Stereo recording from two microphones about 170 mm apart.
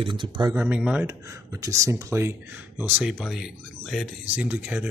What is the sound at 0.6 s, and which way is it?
Speech, 5° right (ahead or behind).